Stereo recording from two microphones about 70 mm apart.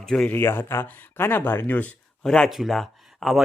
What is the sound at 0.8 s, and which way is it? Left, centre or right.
Speech, left.